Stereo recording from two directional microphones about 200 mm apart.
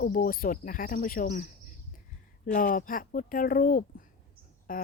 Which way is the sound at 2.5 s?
45° left (ahead or behind).